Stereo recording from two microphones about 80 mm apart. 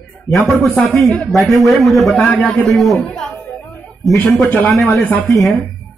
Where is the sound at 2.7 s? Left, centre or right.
Centre.